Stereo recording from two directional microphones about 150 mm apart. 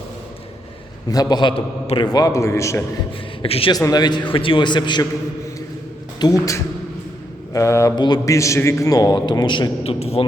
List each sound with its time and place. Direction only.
1.1 s a man's voice: 25° left (ahead or behind)
2.1 s a man's voice: 20° left (ahead or behind)
3.4 s a man's voice: 40° left (ahead or behind)
3.7 s a man's voice: 25° left (ahead or behind)
6.1 s a man's voice: 25° left (ahead or behind); by 10.2 s 40° left (ahead or behind)